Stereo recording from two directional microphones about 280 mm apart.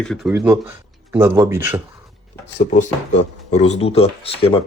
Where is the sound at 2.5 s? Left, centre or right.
Left.